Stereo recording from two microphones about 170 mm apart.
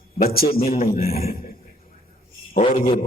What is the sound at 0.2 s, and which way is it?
Speech, 60° left (ahead or behind).